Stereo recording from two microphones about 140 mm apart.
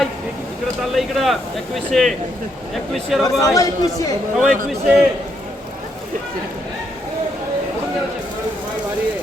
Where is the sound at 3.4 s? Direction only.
25° left (ahead or behind).